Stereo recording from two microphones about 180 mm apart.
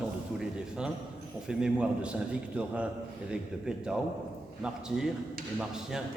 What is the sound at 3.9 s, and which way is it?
A man's voice, 5° right (ahead or behind).